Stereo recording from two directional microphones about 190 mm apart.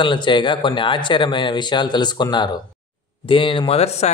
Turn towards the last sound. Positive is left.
turn(degrees=35)  # may be behind; listen again after turning